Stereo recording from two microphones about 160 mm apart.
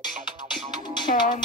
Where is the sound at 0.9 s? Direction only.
30° left (ahead or behind).